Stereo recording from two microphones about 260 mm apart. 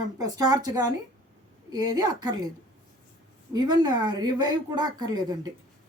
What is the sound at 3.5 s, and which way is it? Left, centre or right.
A woman's voice, centre.